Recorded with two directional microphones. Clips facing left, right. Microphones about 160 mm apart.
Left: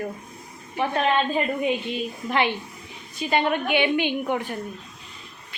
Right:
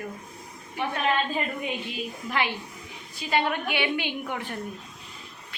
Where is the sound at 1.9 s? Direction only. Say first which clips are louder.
Left 5 dB; 25° left (ahead or behind).